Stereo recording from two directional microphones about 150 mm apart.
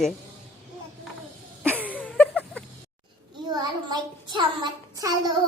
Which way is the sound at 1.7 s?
10° right (ahead or behind).